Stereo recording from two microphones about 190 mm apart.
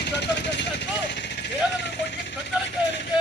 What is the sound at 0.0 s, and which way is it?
Vehicle, 65° left (ahead or behind).